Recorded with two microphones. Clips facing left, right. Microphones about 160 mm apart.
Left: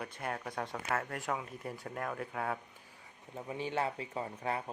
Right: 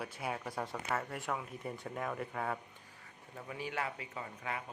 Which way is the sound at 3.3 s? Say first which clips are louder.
Left 4 dB; 25° left (ahead or behind).